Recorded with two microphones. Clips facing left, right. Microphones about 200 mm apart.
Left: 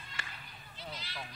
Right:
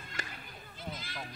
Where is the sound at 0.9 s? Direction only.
50° right (ahead or behind).